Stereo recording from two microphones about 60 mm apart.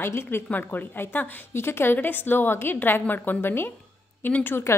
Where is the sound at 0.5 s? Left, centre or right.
Left.